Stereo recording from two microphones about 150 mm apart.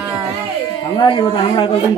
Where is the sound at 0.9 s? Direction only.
35° left (ahead or behind).